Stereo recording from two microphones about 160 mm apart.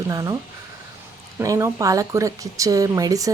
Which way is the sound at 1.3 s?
20° right (ahead or behind).